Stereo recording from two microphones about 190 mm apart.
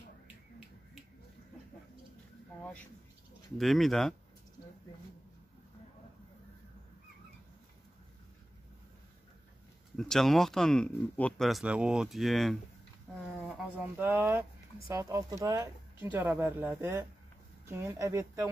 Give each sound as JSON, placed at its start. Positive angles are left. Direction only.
{"t": 3.5, "sound": "speech", "side_deg": 0}
{"t": 9.9, "sound": "speech", "side_deg": 0}
{"t": 13.5, "sound": "speech", "side_deg": -10}